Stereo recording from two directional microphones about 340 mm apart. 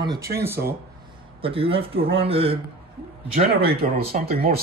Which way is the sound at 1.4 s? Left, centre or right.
Centre.